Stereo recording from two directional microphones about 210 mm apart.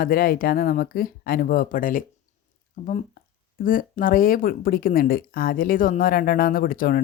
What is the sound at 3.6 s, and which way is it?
Speech, 40° left (ahead or behind).